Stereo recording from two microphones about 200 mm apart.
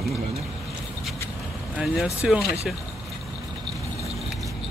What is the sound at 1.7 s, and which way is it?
Speech, centre (ahead or behind).